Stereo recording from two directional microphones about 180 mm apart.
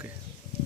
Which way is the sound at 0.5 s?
40° left (ahead or behind).